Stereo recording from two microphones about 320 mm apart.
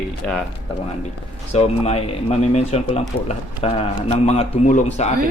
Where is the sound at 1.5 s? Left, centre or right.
Centre.